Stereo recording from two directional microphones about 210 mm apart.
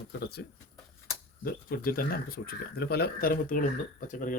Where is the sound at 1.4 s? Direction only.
45° left (ahead or behind).